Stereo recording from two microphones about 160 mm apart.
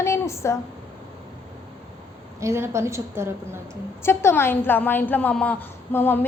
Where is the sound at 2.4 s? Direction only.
15° right (ahead or behind).